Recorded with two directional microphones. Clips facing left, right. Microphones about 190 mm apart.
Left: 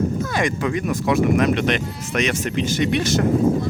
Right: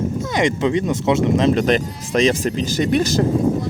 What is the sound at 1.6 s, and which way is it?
Speech, 40° right (ahead or behind).